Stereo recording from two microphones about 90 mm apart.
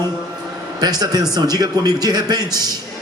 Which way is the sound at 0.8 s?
45° right (ahead or behind).